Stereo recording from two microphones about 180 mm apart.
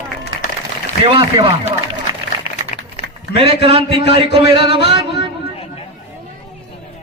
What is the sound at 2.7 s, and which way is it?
Typing, 40° left (ahead or behind).